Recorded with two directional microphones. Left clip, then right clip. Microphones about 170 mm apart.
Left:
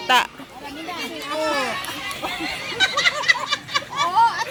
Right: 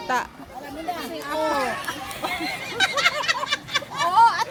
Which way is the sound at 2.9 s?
5° right (ahead or behind).